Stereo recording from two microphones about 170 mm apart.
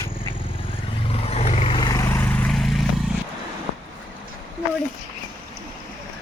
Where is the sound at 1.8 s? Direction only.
20° left (ahead or behind); by 2.8 s centre (ahead or behind).